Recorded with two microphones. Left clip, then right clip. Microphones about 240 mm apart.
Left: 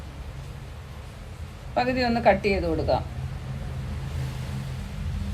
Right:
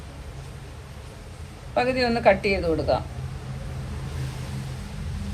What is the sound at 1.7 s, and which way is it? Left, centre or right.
Speech, right.